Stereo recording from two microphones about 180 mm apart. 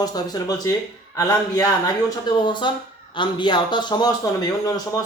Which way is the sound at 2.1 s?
25° left (ahead or behind).